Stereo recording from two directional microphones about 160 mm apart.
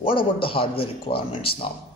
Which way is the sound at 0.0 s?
35° left (ahead or behind).